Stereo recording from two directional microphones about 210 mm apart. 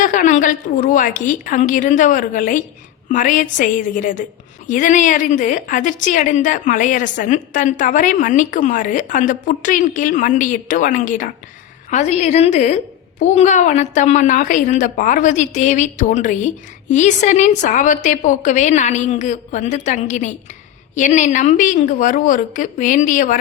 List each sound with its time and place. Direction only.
0.0 s a woman's voice: 40° left (ahead or behind)